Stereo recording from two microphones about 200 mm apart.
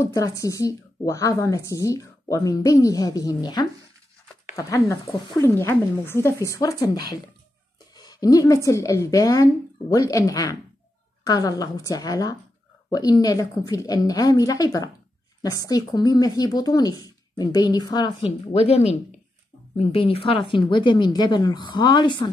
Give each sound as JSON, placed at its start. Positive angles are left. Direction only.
{"t": 0.0, "sound": "a woman's voice", "side_deg": 15}
{"t": 7.9, "sound": "a sound", "side_deg": 20}
{"t": 8.6, "sound": "a woman's voice", "side_deg": 15}